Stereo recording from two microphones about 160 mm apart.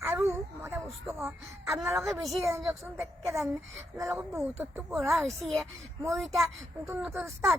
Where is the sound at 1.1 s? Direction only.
15° right (ahead or behind).